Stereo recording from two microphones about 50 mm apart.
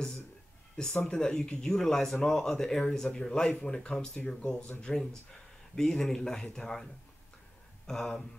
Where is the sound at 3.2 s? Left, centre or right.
Centre.